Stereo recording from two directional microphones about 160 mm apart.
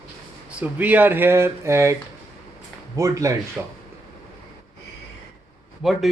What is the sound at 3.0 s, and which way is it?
Speech, 20° right (ahead or behind).